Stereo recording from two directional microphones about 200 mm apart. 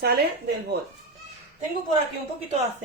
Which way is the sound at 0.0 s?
50° right (ahead or behind).